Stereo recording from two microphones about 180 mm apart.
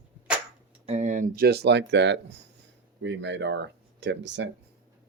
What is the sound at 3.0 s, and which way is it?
Speech, 90° right.